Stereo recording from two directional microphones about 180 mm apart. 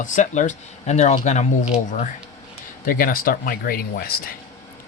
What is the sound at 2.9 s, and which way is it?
Speech, 50° left (ahead or behind).